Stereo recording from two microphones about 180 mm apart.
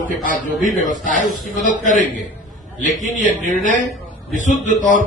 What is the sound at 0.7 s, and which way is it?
Speech, 45° left (ahead or behind).